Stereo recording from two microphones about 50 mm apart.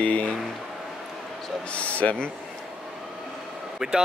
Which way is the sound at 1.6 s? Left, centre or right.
Left.